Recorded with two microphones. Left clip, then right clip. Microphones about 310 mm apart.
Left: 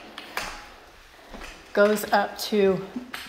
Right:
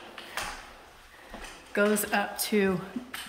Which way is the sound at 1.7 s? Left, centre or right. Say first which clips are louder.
Left 6 dB; centre.